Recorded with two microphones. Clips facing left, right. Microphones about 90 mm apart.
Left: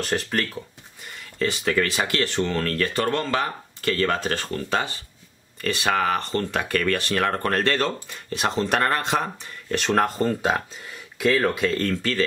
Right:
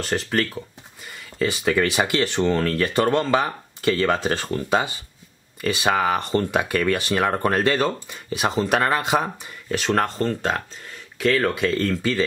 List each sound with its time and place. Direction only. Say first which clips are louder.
0.0 s speech: right 2 dB; centre (ahead or behind)